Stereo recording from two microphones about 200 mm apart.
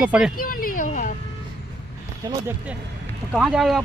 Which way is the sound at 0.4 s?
45° left (ahead or behind).